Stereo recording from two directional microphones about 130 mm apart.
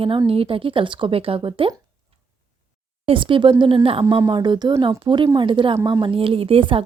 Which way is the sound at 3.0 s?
40° right (ahead or behind).